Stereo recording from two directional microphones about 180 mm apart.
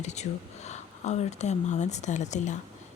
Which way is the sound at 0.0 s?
40° left (ahead or behind).